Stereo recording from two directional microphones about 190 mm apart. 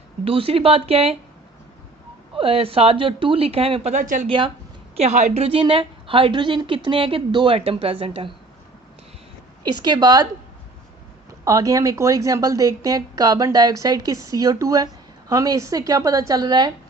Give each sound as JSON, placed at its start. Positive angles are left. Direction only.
{"t": 0.3, "sound": "speech", "side_deg": -30}
{"t": 2.3, "sound": "speech", "side_deg": -30}
{"t": 4.3, "sound": "a woman's voice", "side_deg": -25}
{"t": 4.9, "sound": "a woman's voice", "side_deg": -35}
{"t": 9.6, "sound": "a woman's voice", "side_deg": -20}
{"t": 11.3, "sound": "a woman's voice", "side_deg": -15}